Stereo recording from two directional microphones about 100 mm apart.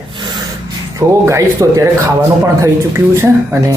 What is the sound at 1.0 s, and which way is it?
Speech, 30° right (ahead or behind).